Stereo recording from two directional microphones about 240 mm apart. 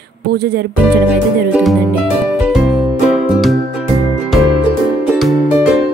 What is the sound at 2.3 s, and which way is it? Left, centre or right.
Music, centre.